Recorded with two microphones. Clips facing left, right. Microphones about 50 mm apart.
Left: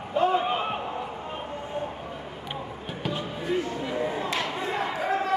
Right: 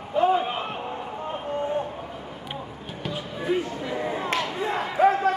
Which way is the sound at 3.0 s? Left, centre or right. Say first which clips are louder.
Even; centre.